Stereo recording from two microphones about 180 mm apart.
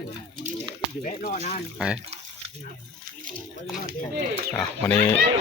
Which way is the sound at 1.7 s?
5° right (ahead or behind).